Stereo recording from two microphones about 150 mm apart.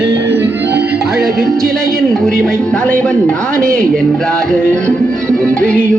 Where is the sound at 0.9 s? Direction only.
90° right.